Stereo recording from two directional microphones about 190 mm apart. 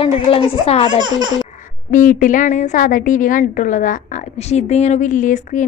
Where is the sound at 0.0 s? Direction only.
30° left (ahead or behind).